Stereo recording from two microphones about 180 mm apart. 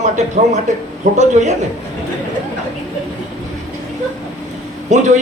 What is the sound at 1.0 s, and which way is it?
Speech, 40° right (ahead or behind).